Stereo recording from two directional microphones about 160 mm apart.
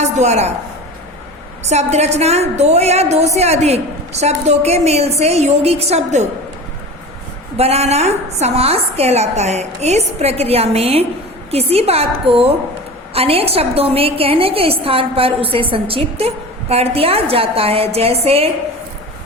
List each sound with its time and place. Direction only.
0.0 s a woman's voice: 45° right (ahead or behind)
1.6 s a woman's voice: 45° right (ahead or behind)
7.5 s a woman's voice: 40° right (ahead or behind)